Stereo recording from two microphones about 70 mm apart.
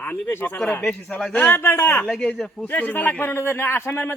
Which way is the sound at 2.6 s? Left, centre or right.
Left.